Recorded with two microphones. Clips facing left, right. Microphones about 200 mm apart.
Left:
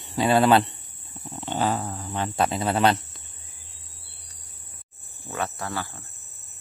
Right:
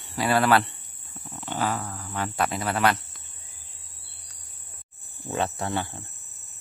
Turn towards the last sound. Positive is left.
turn(degrees=-25)  # may be behind; listen again after turning